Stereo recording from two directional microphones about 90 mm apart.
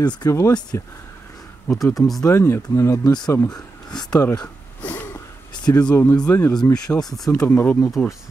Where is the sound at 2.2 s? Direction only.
30° left (ahead or behind).